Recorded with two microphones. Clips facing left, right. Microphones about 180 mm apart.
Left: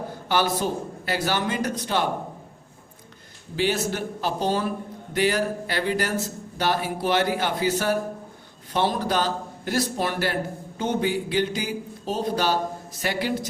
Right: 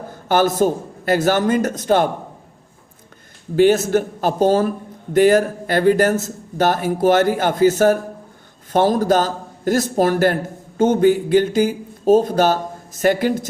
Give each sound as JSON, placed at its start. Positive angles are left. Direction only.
{"t": 0.3, "sound": "speech", "side_deg": -45}
{"t": 3.5, "sound": "speech", "side_deg": -50}